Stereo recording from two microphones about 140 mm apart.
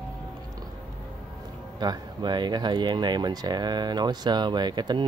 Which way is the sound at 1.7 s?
30° right (ahead or behind).